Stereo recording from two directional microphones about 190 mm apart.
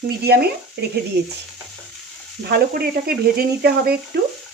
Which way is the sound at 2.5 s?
55° right (ahead or behind).